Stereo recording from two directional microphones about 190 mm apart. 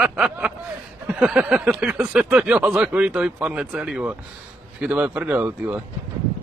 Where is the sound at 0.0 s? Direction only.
5° right (ahead or behind).